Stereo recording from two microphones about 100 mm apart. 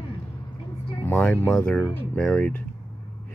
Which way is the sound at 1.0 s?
20° left (ahead or behind).